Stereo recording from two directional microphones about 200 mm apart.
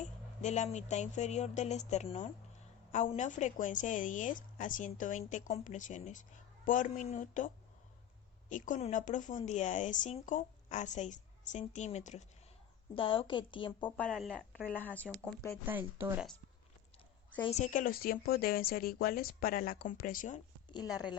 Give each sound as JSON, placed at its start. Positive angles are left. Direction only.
{"t": 0.0, "sound": "a woman's voice", "side_deg": 35}
{"t": 13.9, "sound": "speech", "side_deg": 5}
{"t": 15.6, "sound": "speech", "side_deg": -10}
{"t": 17.4, "sound": "speech", "side_deg": 35}
{"t": 20.7, "sound": "a woman's voice", "side_deg": 20}